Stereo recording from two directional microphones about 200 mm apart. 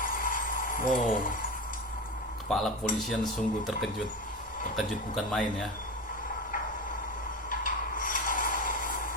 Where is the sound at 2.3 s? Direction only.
Centre (ahead or behind).